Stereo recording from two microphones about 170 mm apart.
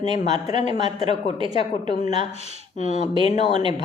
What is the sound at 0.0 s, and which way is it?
Speech, 40° left (ahead or behind).